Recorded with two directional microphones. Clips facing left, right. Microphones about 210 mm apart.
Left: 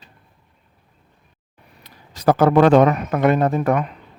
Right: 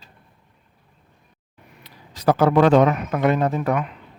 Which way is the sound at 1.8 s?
45° left (ahead or behind).